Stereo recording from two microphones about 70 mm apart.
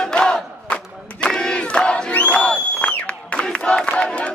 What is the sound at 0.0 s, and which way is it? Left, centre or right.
Battle cry, centre.